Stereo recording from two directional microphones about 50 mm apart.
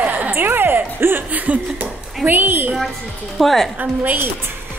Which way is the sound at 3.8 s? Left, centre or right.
Right.